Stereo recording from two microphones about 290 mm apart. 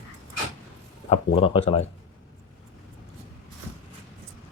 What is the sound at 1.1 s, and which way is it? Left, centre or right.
Speech, centre.